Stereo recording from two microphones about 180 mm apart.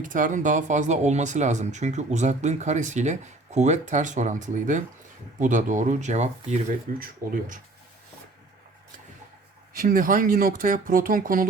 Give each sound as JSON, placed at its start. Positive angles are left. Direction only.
{"t": 0.0, "sound": "speech", "side_deg": -45}
{"t": 9.7, "sound": "speech", "side_deg": -50}